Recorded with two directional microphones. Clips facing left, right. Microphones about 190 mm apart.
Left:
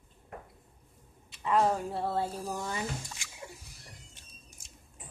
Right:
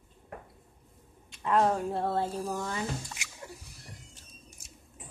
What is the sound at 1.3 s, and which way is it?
Speech, centre (ahead or behind).